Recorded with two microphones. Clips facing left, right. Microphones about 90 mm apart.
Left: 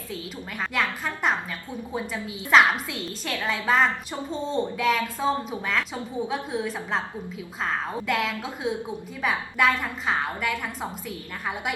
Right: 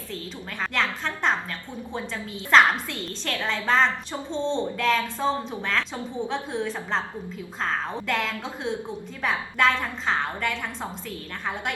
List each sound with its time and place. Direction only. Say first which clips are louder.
0.6 s a woman's voice: even; 5° left (ahead or behind)